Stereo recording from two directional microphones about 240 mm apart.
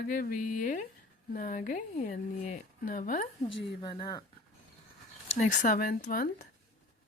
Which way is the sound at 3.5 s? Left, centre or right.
Left.